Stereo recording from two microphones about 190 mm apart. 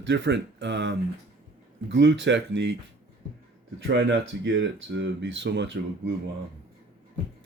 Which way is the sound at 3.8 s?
70° right (ahead or behind).